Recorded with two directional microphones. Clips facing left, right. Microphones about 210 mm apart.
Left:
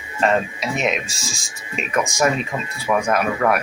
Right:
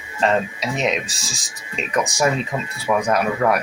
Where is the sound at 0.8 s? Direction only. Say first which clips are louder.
Right 1 dB; 35° right (ahead or behind).